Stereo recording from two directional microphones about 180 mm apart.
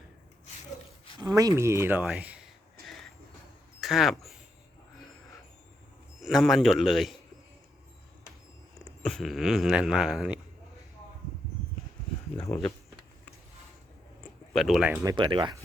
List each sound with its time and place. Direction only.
1.3 s speech: 20° right (ahead or behind)
3.8 s speech: centre (ahead or behind)
6.2 s speech: centre (ahead or behind)
9.0 s speech: centre (ahead or behind)
14.5 s speech: centre (ahead or behind)
15.0 s speech: 25° right (ahead or behind)